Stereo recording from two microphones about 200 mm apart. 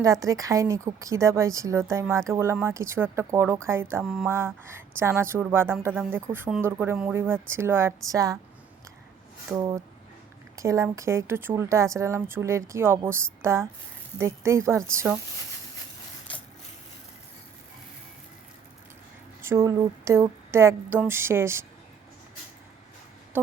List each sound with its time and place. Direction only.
0.0 s speech: 15° right (ahead or behind)
4.0 s mantra: centre (ahead or behind)
4.3 s speech: 10° right (ahead or behind)
9.5 s speech: 15° right (ahead or behind)
19.4 s speech: 15° right (ahead or behind)